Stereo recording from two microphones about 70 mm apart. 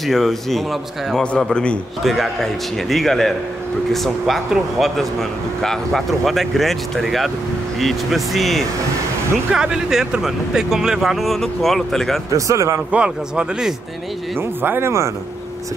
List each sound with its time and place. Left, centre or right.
0.0 s speech: centre
1.5 s a man's voice: centre
2.0 s speech: centre
9.5 s speech: centre
12.4 s a man's voice: right
12.9 s speech: centre
14.6 s speech: right
14.9 s a man's voice: right